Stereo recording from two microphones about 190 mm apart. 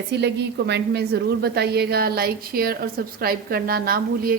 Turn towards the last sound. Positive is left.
turn(degrees=-50)  # may be behind; listen again after turning